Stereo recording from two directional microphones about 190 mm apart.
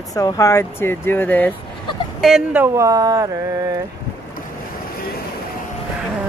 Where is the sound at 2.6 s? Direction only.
15° right (ahead or behind).